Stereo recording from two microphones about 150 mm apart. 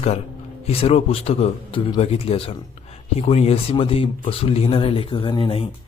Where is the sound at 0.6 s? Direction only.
40° left (ahead or behind).